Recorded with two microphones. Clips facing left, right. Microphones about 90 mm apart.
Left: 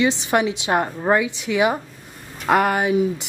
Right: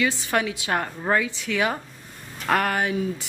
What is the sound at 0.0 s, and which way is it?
A woman's voice, 20° left (ahead or behind).